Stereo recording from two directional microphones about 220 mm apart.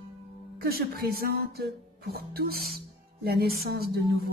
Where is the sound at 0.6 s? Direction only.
45° right (ahead or behind).